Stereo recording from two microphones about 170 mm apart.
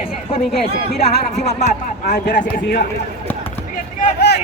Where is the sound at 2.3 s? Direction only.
60° left (ahead or behind).